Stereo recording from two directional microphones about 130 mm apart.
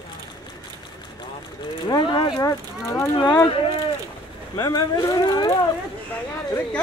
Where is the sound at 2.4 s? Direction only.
25° left (ahead or behind).